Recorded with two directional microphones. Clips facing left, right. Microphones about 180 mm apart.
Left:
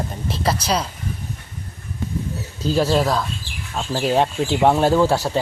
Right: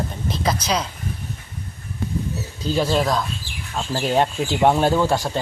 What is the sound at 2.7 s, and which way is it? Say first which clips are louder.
Speech: left 2 dB; 5° left (ahead or behind).